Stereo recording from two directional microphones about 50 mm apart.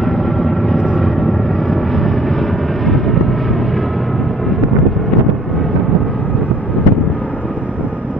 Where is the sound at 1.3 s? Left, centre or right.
Centre.